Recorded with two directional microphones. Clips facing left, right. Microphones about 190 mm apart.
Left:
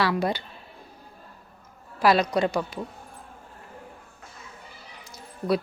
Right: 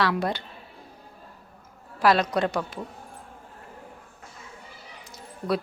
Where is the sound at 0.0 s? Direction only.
5° left (ahead or behind).